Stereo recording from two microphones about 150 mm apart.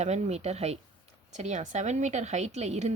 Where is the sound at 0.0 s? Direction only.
50° right (ahead or behind).